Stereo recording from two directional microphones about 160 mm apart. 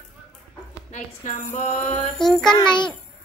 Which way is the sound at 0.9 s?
50° left (ahead or behind).